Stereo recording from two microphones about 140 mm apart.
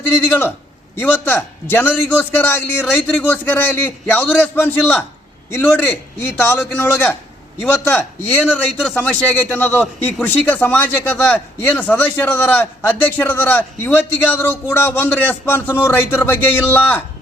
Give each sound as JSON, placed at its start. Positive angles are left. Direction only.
{"t": 0.3, "sound": "speech", "side_deg": 15}